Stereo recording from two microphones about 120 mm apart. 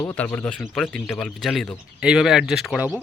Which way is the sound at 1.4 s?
Centre (ahead or behind).